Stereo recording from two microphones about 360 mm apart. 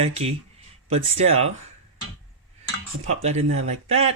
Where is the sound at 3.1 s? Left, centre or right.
Centre.